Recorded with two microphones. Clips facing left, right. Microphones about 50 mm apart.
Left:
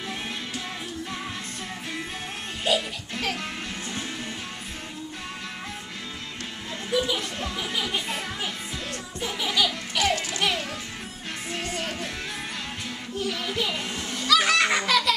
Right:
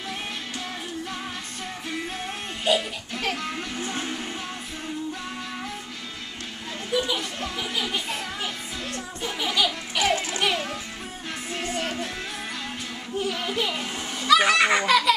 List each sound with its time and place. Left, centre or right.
2.6 s music: centre
3.8 s music: right
6.9 s speech: centre
9.2 s laughter: centre
10.4 s music: centre
13.2 s a child's voice: centre
13.7 s baby laughter: centre